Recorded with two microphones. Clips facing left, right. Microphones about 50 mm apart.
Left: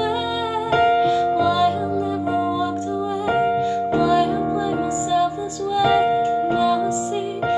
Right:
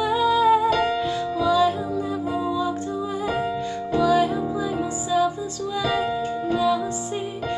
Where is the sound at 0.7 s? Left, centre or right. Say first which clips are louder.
Left 5 dB; left.